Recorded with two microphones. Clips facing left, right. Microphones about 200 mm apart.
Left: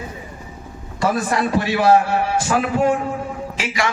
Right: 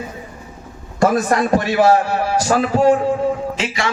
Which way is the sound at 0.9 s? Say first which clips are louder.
Right 4 dB; 45° right (ahead or behind).